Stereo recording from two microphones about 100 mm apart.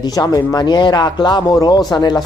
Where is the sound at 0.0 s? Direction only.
40° left (ahead or behind).